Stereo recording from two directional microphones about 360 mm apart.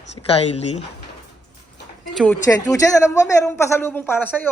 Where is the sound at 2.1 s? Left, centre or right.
Centre.